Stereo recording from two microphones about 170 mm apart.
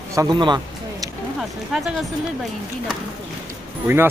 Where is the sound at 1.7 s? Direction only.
Centre (ahead or behind).